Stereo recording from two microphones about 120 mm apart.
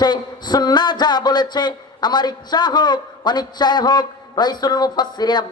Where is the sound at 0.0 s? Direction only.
35° left (ahead or behind).